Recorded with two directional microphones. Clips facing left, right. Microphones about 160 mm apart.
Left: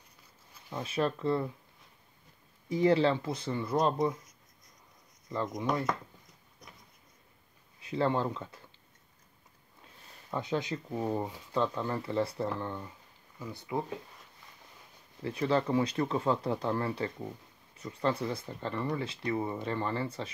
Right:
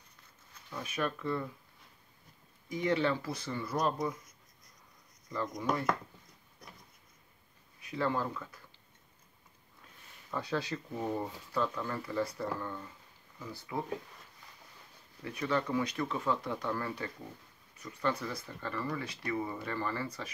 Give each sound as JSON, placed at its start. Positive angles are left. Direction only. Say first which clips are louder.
{"t": 0.7, "sound": "speech", "louder": "left 4 dB", "side_deg": 30}
{"t": 2.7, "sound": "speech", "louder": "left 5 dB", "side_deg": 30}
{"t": 7.8, "sound": "speech", "louder": "left 4 dB", "side_deg": 30}
{"t": 10.3, "sound": "speech", "louder": "left 2 dB", "side_deg": 20}
{"t": 15.2, "sound": "speech", "louder": "left 4 dB", "side_deg": 30}